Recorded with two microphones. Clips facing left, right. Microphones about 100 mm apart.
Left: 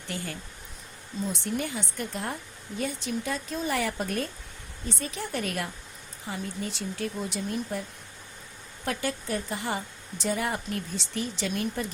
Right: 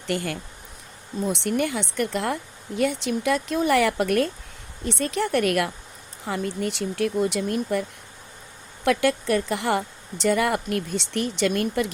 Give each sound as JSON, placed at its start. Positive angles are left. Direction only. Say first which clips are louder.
{"t": 0.1, "sound": "speech", "louder": "right 9 dB", "side_deg": -75}